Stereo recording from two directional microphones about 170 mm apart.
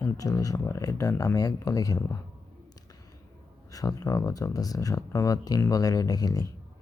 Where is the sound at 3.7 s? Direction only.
20° left (ahead or behind).